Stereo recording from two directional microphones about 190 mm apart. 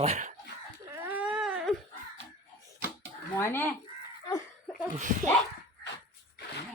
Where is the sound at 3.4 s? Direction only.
10° left (ahead or behind).